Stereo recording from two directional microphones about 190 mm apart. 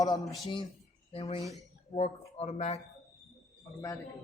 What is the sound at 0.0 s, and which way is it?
Speech, 20° left (ahead or behind).